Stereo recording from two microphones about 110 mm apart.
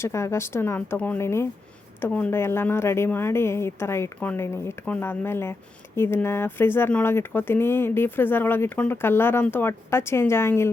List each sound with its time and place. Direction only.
0.0 s speech: 25° left (ahead or behind)